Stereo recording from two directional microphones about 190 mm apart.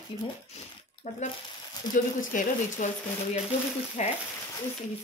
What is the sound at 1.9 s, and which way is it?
Speech, 20° left (ahead or behind).